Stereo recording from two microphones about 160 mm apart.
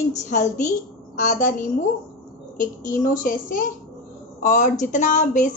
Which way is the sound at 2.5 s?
55° left (ahead or behind).